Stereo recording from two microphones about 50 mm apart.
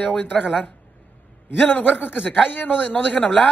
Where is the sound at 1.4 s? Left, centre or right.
Left.